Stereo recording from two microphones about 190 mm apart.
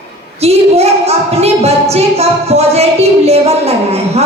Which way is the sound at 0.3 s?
35° right (ahead or behind).